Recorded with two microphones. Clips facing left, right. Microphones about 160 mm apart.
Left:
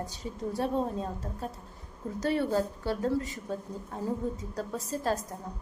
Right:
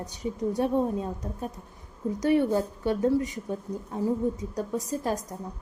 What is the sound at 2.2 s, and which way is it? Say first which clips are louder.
A woman's voice: right 4 dB; 15° right (ahead or behind).